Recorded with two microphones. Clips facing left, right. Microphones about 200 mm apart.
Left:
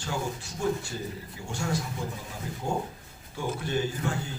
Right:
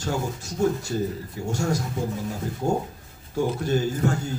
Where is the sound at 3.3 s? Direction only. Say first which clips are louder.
Right 7 dB; 40° right (ahead or behind).